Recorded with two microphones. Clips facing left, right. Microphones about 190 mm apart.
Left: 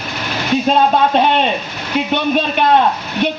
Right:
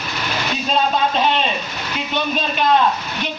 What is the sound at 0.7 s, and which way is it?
Speech, 60° left (ahead or behind).